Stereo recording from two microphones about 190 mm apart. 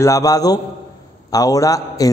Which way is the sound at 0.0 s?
20° left (ahead or behind).